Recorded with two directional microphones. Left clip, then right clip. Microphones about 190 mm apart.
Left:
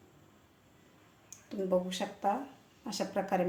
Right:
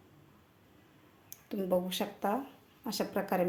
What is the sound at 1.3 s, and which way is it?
Speech, 40° right (ahead or behind).